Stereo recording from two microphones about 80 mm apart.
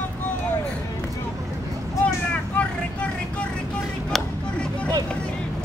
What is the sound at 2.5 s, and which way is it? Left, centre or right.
Vehicle, centre.